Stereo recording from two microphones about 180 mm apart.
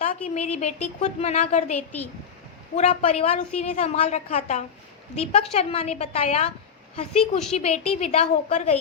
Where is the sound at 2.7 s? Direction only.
35° left (ahead or behind).